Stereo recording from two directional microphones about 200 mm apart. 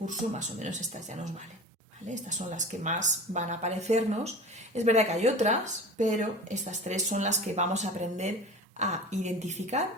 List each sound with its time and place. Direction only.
0.0 s speech: 35° right (ahead or behind)
2.5 s speech: 40° right (ahead or behind)